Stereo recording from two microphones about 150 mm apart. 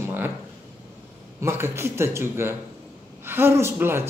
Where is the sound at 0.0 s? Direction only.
15° right (ahead or behind).